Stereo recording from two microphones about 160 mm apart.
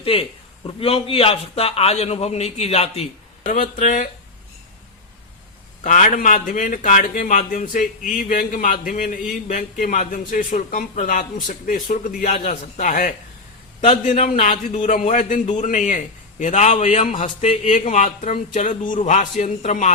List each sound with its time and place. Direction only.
0.0 s a man's voice: 35° left (ahead or behind)
3.4 s a man's voice: 55° left (ahead or behind)
5.8 s a man's voice: 50° left (ahead or behind)